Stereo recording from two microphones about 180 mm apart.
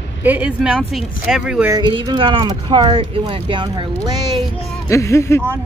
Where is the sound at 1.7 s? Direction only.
25° right (ahead or behind).